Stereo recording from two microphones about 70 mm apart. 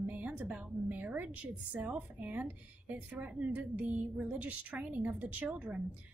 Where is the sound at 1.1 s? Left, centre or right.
Right.